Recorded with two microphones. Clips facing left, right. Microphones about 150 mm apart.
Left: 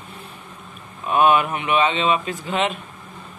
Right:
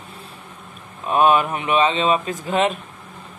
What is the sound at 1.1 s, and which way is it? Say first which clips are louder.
Speech: right 1 dB; 35° right (ahead or behind).